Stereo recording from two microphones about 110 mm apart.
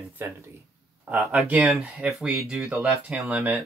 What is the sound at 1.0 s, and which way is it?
Speech, 5° right (ahead or behind).